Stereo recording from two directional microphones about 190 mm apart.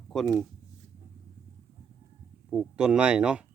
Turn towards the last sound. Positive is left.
turn(degrees=-5)  # may be behind; listen again after turning